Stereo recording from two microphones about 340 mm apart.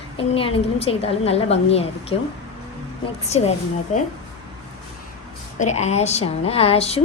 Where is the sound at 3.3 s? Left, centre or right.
Centre.